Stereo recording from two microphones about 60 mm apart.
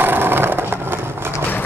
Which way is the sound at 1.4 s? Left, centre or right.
Left.